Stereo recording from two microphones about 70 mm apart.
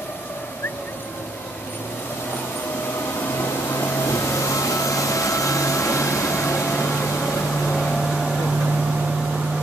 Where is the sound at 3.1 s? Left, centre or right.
Left.